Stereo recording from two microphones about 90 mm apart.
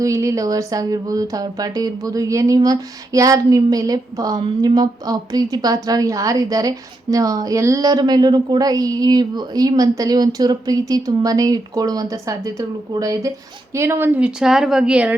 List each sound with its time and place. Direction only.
0.0 s speech: 35° right (ahead or behind)
13.7 s speech: 30° right (ahead or behind)
14.2 s speech: 10° right (ahead or behind)